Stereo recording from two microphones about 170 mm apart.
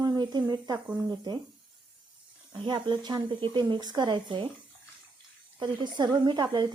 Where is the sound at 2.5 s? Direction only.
25° right (ahead or behind).